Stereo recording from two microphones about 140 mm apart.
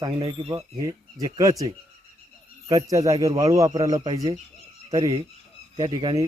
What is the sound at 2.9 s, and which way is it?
Speech, 25° right (ahead or behind).